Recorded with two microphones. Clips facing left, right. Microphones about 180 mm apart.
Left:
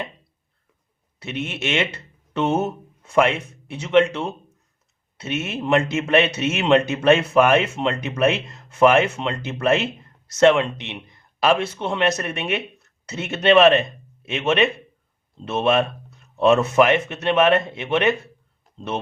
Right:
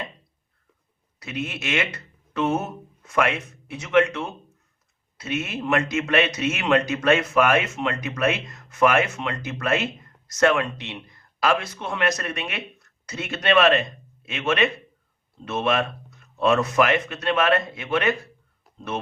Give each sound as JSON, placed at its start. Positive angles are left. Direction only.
{"t": 1.2, "sound": "a man's voice", "side_deg": 25}